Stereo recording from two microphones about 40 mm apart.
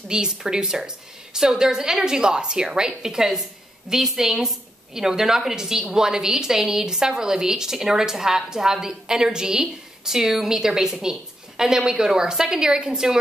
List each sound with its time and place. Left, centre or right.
0.1 s a woman's voice: centre